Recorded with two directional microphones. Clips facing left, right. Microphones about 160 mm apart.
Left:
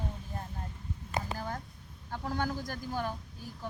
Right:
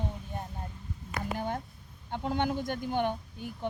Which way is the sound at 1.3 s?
25° right (ahead or behind).